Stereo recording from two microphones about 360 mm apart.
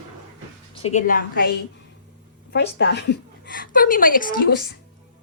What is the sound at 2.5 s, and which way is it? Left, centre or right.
A woman's voice, left.